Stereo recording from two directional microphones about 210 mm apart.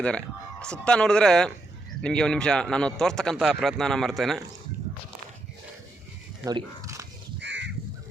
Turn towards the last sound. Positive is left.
turn(degrees=-60)  # may be behind; listen again after turning